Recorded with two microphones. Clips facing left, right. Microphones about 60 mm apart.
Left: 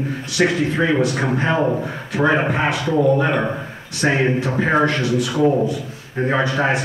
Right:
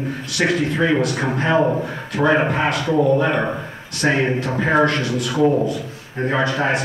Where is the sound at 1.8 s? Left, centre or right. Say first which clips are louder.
Even; centre.